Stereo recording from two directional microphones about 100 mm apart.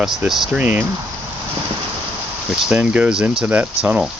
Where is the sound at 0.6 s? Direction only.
15° right (ahead or behind).